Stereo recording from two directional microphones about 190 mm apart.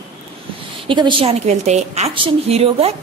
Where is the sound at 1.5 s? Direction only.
35° right (ahead or behind).